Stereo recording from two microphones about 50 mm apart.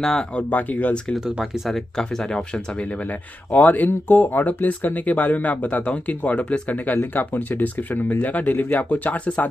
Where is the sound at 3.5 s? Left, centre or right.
Left.